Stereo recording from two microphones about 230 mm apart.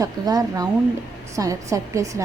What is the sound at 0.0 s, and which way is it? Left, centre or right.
Speech, centre.